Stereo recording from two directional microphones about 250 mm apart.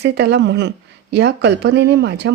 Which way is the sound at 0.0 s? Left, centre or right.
Right.